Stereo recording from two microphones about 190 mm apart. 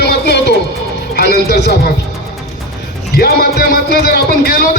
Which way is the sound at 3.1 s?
55° left (ahead or behind).